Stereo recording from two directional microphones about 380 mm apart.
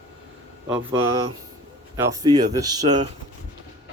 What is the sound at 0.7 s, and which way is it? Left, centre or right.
Speech, centre.